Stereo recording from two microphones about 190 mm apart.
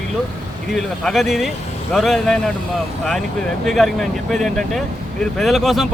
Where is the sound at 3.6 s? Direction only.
Centre (ahead or behind).